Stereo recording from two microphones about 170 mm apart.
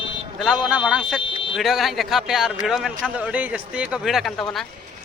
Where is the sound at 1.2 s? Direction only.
30° left (ahead or behind).